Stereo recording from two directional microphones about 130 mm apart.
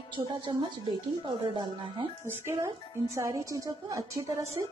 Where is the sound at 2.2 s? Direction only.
20° right (ahead or behind).